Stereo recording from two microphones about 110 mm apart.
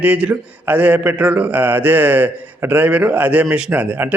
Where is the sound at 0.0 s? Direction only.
15° right (ahead or behind).